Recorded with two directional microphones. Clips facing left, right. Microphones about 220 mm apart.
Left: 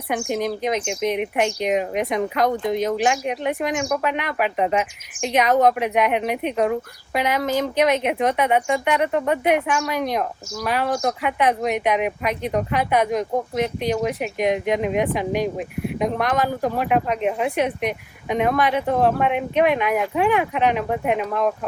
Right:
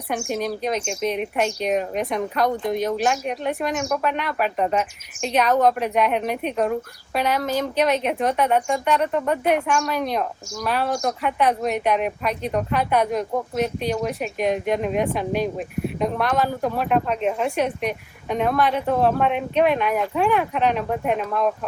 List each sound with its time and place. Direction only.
0.1 s speech: 15° left (ahead or behind)